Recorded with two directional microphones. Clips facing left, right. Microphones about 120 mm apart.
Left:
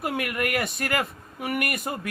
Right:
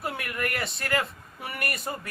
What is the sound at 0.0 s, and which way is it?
Speech, 60° left (ahead or behind).